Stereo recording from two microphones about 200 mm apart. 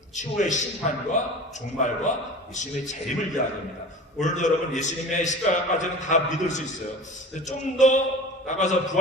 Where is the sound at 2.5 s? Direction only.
35° left (ahead or behind).